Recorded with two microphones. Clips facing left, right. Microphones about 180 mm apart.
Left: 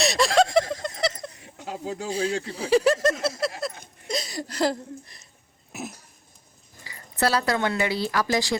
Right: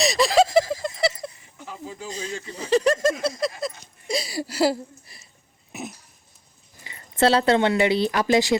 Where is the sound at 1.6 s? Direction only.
75° left (ahead or behind).